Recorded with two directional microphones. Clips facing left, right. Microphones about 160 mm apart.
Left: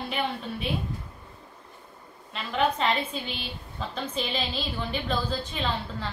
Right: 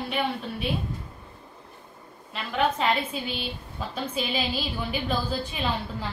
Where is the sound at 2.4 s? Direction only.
5° right (ahead or behind).